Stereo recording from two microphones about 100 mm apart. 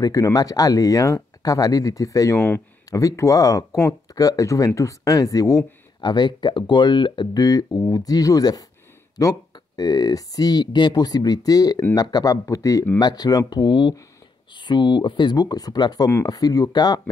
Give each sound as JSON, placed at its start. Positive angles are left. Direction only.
{"t": 0.0, "sound": "speech", "side_deg": 35}
{"t": 5.9, "sound": "speech", "side_deg": 45}